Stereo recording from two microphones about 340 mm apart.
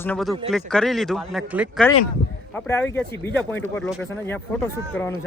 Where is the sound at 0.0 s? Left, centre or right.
Centre.